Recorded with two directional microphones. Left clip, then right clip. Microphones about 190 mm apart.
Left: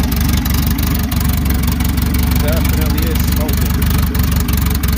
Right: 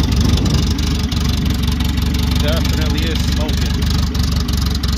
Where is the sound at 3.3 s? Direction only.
20° left (ahead or behind).